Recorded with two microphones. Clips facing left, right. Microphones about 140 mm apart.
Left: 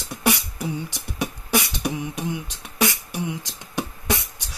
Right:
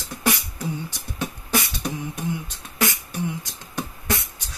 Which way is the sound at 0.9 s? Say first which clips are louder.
Left 2 dB; 15° left (ahead or behind).